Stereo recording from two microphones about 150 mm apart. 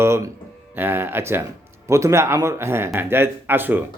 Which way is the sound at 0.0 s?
15° right (ahead or behind).